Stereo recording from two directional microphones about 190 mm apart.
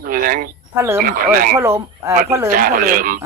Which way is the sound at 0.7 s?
10° right (ahead or behind).